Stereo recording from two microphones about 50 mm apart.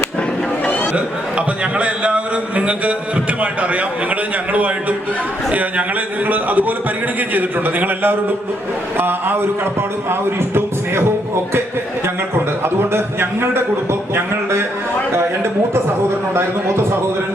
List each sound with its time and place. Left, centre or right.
0.9 s a man's voice: right
12.6 s a man's voice: right